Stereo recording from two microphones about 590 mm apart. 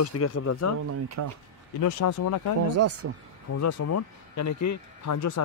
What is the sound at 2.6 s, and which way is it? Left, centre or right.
Speech, right.